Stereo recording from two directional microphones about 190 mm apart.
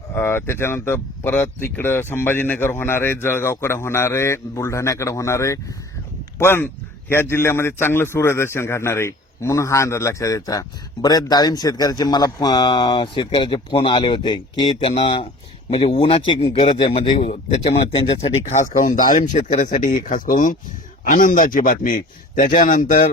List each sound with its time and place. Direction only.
0.1 s a man's voice: 10° left (ahead or behind); by 18.6 s 35° left (ahead or behind)
18.8 s a man's voice: 45° left (ahead or behind)